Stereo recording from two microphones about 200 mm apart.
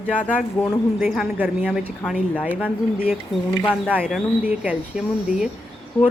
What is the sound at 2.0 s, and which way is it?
Speech, 5° left (ahead or behind).